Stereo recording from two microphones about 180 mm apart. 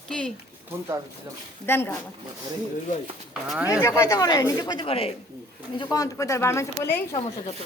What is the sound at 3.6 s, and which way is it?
Speech, 20° left (ahead or behind).